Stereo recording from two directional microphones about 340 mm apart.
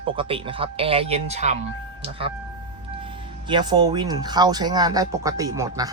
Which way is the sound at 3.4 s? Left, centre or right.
Centre.